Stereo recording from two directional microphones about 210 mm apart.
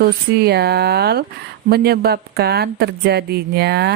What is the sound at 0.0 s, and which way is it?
Speech, 50° right (ahead or behind).